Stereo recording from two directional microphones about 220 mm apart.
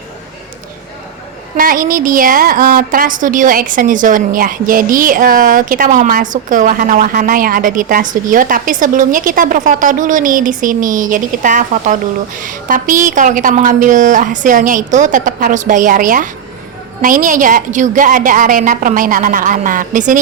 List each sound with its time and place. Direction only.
1.5 s a woman's voice: 40° right (ahead or behind)